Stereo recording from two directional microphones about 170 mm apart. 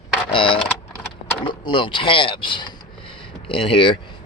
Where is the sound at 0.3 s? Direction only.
30° left (ahead or behind).